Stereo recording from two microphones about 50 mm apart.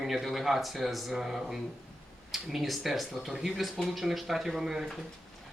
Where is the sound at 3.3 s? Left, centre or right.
Centre.